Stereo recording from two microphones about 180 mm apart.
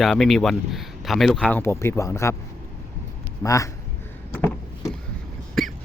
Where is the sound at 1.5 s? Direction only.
15° left (ahead or behind).